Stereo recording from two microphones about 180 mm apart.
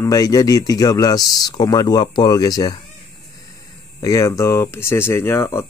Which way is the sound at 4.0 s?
15° left (ahead or behind).